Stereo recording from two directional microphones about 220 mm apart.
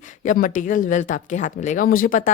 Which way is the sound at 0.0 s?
35° left (ahead or behind).